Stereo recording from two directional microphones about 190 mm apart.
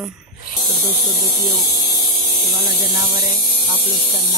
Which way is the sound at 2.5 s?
20° right (ahead or behind).